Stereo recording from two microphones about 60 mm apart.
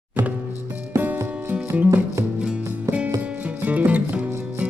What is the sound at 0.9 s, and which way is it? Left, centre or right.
Music, right.